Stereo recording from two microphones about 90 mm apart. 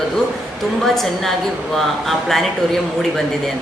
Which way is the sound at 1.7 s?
5° left (ahead or behind).